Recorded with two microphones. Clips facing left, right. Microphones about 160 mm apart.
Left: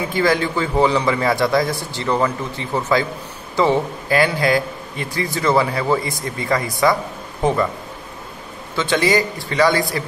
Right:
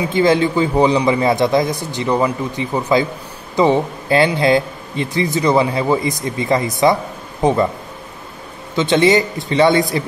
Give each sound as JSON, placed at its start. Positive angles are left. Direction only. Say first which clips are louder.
{"t": 0.1, "sound": "a man's voice", "louder": "right 5 dB", "side_deg": -20}
{"t": 8.7, "sound": "a man's voice", "louder": "right 4 dB", "side_deg": -20}